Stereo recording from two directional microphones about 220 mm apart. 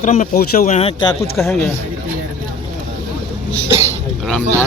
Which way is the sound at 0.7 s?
20° left (ahead or behind).